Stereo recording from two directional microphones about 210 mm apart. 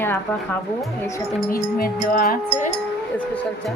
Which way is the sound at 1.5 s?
45° left (ahead or behind).